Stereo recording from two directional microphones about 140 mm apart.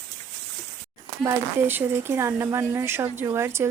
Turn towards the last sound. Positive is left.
turn(degrees=-20)  # may be behind; listen again after turning